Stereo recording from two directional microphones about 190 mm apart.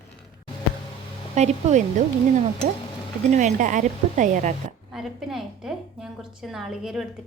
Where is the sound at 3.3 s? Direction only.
40° right (ahead or behind).